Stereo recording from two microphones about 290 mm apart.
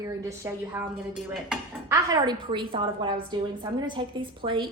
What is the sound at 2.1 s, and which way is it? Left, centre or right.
A woman's voice, centre.